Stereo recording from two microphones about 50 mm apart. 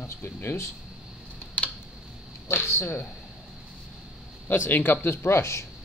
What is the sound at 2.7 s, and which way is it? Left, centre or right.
Speech, left.